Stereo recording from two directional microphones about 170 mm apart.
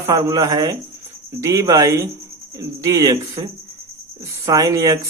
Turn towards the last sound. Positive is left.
turn(degrees=-20)  # may be behind; listen again after turning